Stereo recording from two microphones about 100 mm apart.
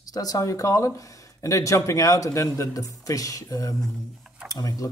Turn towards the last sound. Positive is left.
turn(degrees=35)  # may be behind; listen again after turning